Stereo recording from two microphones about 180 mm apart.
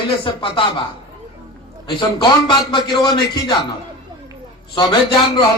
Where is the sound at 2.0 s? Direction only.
25° left (ahead or behind).